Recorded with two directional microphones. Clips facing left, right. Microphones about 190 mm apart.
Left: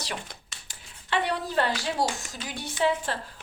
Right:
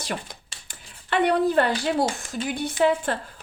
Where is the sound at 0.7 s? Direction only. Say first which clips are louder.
Right 3 dB; 55° right (ahead or behind).